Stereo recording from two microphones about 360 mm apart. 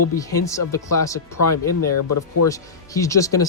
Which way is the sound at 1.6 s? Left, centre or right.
Left.